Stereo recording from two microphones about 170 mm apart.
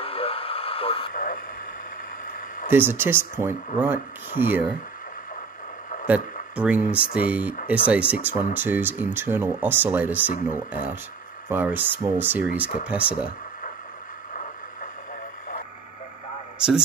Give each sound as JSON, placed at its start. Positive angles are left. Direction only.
{"t": 0.0, "sound": "radio", "side_deg": 35}
{"t": 1.1, "sound": "speech", "side_deg": 55}
{"t": 2.7, "sound": "speech", "side_deg": -15}
{"t": 6.0, "sound": "speech", "side_deg": -5}
{"t": 16.5, "sound": "a man's voice", "side_deg": -5}